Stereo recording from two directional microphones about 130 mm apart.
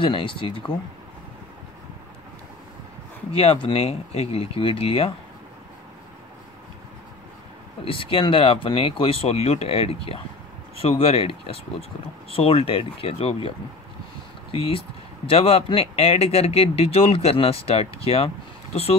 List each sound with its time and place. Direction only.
0.0 s speech: 40° left (ahead or behind)
3.3 s speech: 45° left (ahead or behind)
7.8 s speech: 45° left (ahead or behind)
14.5 s speech: 45° left (ahead or behind)